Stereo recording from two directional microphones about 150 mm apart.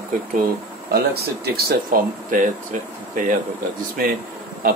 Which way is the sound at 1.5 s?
65° right (ahead or behind).